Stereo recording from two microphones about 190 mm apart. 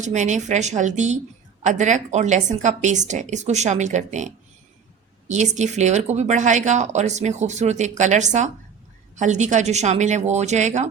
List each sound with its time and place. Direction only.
0.0 s speech: 40° right (ahead or behind)
5.3 s speech: 40° right (ahead or behind)